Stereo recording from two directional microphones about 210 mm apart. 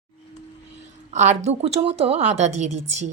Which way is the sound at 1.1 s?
35° right (ahead or behind).